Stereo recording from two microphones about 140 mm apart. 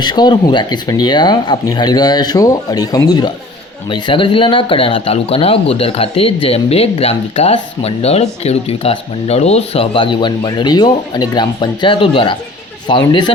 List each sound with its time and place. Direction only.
0.0 s speech: 30° left (ahead or behind)